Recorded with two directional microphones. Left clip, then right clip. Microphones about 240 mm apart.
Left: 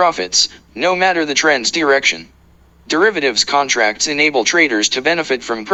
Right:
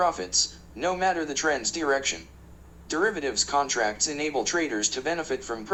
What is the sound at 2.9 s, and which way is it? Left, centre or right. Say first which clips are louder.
Speech: left 12 dB; left.